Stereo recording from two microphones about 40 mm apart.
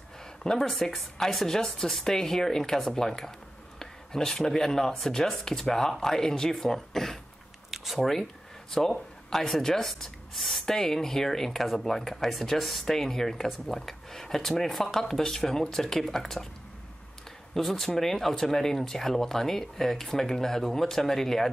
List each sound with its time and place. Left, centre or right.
0.4 s speech: centre
0.7 s speech: centre
7.7 s a sound: centre
8.1 s speech: centre
17.6 s speech: centre